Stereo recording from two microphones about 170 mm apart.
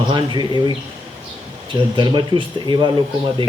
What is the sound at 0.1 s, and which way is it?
Speech, 25° right (ahead or behind).